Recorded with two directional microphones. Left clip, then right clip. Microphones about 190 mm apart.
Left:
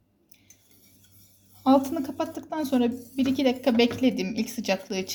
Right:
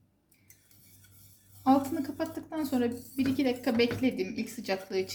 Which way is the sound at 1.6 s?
45° left (ahead or behind).